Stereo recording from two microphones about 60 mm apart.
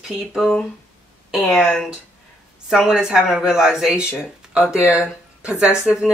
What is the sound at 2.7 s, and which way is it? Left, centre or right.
Speech, centre.